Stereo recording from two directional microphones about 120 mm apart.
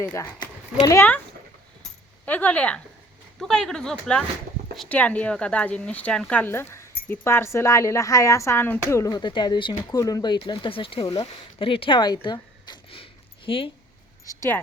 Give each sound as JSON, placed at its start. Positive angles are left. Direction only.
{"t": 0.0, "sound": "speech", "side_deg": 25}
{"t": 2.2, "sound": "speech", "side_deg": 15}
{"t": 10.3, "sound": "speech", "side_deg": 40}
{"t": 14.3, "sound": "speech", "side_deg": 25}